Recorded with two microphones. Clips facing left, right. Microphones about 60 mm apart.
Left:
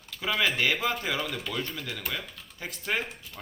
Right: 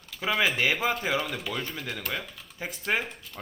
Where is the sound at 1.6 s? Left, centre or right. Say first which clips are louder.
Even; centre.